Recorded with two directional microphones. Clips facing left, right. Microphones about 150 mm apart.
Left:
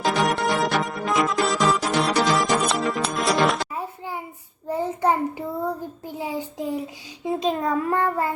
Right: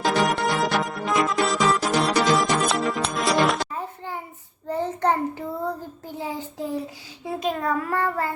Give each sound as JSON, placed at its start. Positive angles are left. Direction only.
{"t": 0.0, "sound": "music", "side_deg": 0}
{"t": 3.8, "sound": "a sound", "side_deg": 10}
{"t": 4.7, "sound": "child singing", "side_deg": 10}
{"t": 7.3, "sound": "a child's voice", "side_deg": 20}